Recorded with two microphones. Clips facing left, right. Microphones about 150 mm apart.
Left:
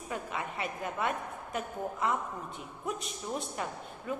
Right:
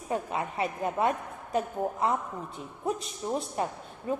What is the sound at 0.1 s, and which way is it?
A woman's voice, 35° right (ahead or behind).